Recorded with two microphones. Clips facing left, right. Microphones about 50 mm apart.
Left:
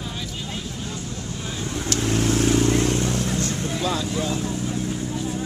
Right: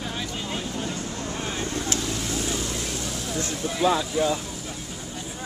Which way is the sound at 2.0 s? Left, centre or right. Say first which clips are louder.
Left 7 dB; left.